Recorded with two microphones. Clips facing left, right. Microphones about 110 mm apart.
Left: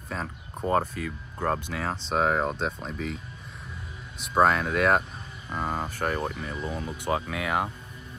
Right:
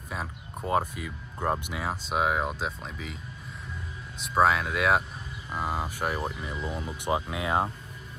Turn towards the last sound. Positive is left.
turn(degrees=-25)  # may be behind; listen again after turning